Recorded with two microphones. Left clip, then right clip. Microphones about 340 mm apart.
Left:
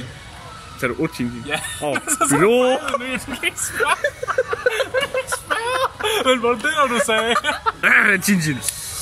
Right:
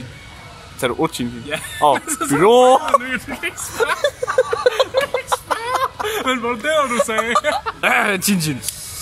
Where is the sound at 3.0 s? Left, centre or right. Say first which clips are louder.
Even; centre.